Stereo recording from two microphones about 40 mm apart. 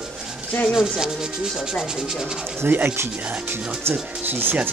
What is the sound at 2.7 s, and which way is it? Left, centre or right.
Speech, right.